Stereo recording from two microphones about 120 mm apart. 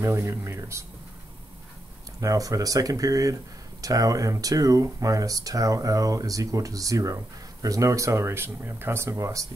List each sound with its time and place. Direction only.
0.0 s speech: 20° right (ahead or behind)
2.1 s speech: 30° right (ahead or behind)